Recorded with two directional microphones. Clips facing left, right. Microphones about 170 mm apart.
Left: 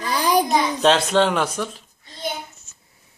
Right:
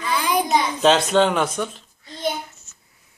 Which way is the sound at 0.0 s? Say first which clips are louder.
Left 2 dB; 35° left (ahead or behind).